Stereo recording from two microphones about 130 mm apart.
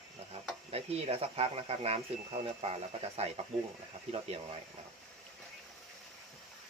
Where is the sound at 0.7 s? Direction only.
50° right (ahead or behind).